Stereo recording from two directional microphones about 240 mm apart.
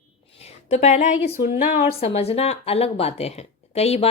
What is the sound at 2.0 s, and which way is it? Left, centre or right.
Speech, left.